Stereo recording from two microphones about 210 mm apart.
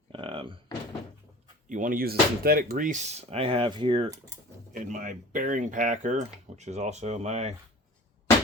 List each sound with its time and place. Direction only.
0.1 s door: 25° right (ahead or behind)
1.7 s speech: 40° right (ahead or behind); by 4.1 s 25° right (ahead or behind)
4.7 s speech: 40° right (ahead or behind)